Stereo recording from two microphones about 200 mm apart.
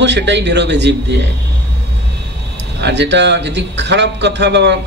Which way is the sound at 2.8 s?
60° right (ahead or behind).